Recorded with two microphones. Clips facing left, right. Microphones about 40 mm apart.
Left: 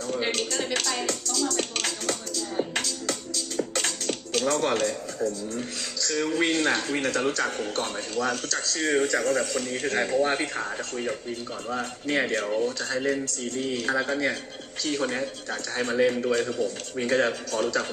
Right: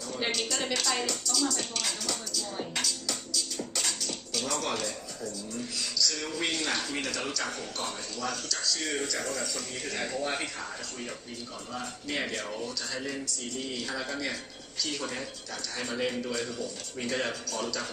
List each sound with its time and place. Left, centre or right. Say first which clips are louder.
0.3 s speech: left 3 dB; left
1.0 s music: left 2 dB; left
2.7 s speech: left 4 dB; left